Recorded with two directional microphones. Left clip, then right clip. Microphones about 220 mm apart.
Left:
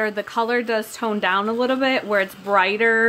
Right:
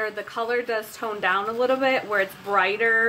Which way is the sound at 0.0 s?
45° left (ahead or behind).